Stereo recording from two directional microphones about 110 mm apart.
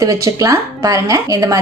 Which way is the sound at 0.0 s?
30° right (ahead or behind).